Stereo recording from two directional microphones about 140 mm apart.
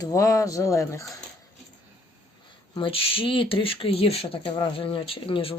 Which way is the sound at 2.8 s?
40° left (ahead or behind).